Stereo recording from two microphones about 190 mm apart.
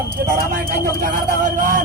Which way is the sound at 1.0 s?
45° right (ahead or behind).